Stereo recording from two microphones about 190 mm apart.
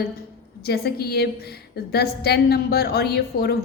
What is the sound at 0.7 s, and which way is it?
A woman's voice, 55° left (ahead or behind).